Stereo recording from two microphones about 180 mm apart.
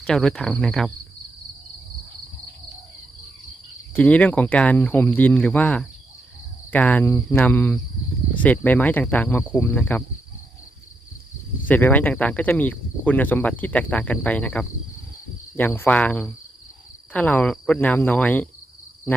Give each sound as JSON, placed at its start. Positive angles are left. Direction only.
{"t": 0.0, "sound": "speech", "side_deg": 5}
{"t": 3.9, "sound": "speech", "side_deg": 10}
{"t": 11.7, "sound": "speech", "side_deg": 10}